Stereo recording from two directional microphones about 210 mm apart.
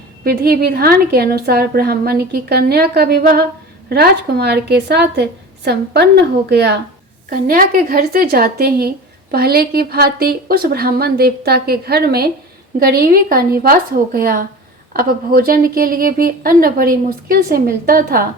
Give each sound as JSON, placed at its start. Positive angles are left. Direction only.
{"t": 0.3, "sound": "a woman's voice", "side_deg": -45}